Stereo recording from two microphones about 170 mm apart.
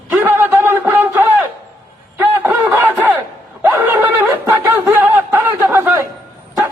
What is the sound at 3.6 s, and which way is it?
Snicker, 10° right (ahead or behind).